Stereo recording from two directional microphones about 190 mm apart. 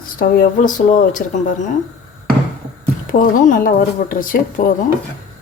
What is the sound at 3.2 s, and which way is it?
Speech, 45° left (ahead or behind).